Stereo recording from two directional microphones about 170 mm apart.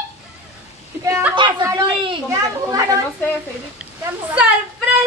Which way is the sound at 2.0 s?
25° right (ahead or behind).